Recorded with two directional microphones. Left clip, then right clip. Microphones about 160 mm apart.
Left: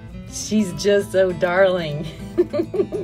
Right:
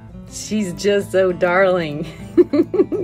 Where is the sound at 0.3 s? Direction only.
20° right (ahead or behind).